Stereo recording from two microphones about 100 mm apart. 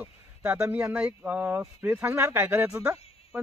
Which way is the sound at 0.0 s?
15° right (ahead or behind).